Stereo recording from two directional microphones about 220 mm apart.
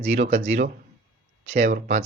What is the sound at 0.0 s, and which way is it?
Speech, 30° right (ahead or behind).